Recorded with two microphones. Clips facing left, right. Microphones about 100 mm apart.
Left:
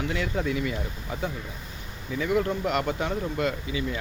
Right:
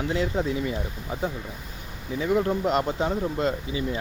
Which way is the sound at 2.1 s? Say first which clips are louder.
Right 2 dB; 30° right (ahead or behind).